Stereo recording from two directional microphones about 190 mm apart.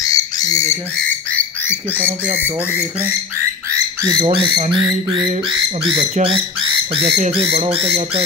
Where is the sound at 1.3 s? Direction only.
10° left (ahead or behind).